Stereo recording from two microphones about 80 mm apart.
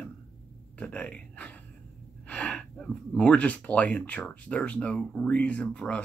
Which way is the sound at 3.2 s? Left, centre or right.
Centre.